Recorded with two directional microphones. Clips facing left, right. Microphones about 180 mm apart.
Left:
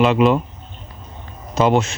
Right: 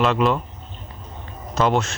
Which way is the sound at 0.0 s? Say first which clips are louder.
Left 5 dB; 15° left (ahead or behind).